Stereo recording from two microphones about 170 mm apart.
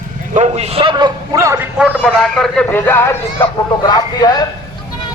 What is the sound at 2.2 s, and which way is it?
A man's voice, 5° left (ahead or behind).